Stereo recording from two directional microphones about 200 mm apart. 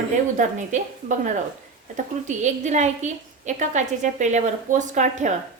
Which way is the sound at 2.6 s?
35° right (ahead or behind).